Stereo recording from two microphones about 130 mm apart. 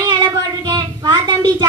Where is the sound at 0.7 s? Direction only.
30° right (ahead or behind).